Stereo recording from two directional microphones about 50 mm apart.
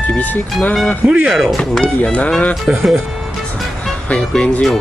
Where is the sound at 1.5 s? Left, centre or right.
Centre.